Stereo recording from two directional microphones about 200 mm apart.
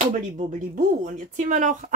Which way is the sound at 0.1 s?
40° right (ahead or behind).